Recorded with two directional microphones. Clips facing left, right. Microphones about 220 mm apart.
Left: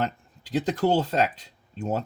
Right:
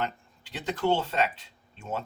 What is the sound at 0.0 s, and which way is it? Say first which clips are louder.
Speech: left 4 dB; 35° left (ahead or behind).